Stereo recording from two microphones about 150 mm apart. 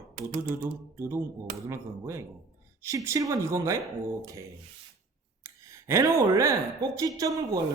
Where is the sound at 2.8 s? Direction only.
20° right (ahead or behind).